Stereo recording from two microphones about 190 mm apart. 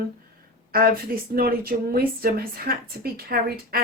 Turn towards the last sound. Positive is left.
turn(degrees=-55)  # may be behind; listen again after turning